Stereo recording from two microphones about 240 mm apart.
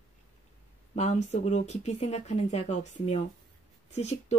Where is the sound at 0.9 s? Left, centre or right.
Left.